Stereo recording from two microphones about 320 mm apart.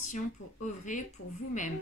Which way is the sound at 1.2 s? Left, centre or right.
Left.